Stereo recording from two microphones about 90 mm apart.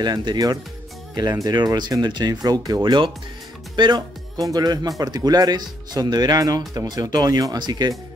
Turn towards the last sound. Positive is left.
turn(degrees=-50)  # may be behind; listen again after turning